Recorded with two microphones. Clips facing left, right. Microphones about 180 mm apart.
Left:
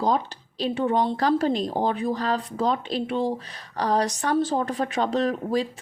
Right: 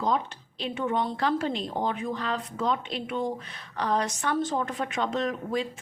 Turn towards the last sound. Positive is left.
turn(degrees=35)  # may be behind; listen again after turning